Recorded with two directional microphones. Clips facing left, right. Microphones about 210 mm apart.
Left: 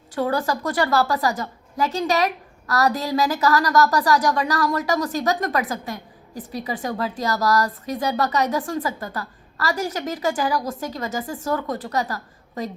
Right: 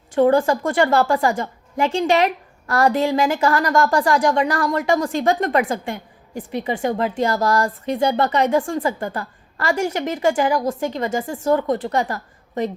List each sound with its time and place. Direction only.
0.2 s a woman's voice: 25° right (ahead or behind)